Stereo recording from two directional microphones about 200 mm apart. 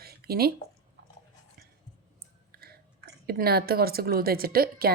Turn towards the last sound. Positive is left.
turn(degrees=-50)  # may be behind; listen again after turning